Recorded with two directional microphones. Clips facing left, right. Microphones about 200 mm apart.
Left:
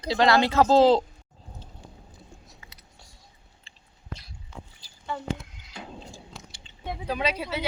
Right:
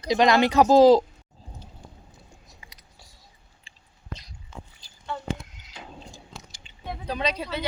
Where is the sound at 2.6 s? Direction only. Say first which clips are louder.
Even; 15° right (ahead or behind).